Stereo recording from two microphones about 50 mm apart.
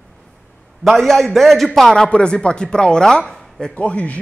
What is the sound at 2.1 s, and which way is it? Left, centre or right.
Speech, centre.